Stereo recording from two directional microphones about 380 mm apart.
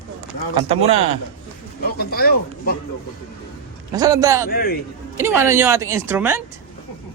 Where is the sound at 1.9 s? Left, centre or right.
Left.